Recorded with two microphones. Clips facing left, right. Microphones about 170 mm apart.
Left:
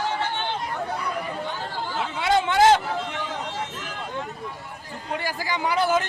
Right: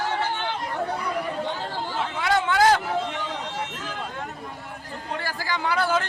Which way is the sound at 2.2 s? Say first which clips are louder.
Left 2 dB; 20° left (ahead or behind).